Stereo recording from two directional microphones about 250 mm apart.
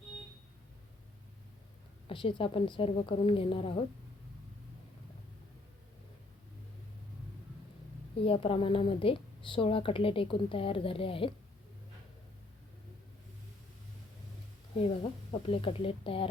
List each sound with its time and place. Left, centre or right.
2.0 s speech: left
8.2 s speech: left
14.8 s speech: left